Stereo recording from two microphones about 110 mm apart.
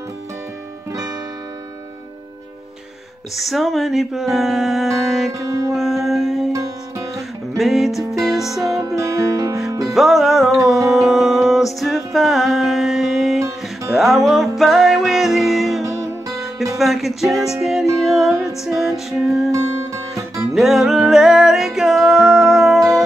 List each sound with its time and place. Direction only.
3.3 s music: centre (ahead or behind)
8.7 s music: 30° right (ahead or behind)
9.8 s music: centre (ahead or behind)
15.8 s music: 25° right (ahead or behind)
16.7 s music: centre (ahead or behind)